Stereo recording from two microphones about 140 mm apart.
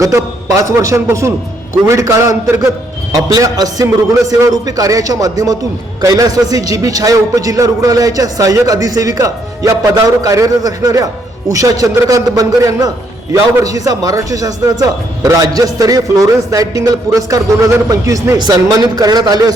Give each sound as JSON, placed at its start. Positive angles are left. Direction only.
{"t": 0.0, "sound": "a man's voice", "side_deg": -20}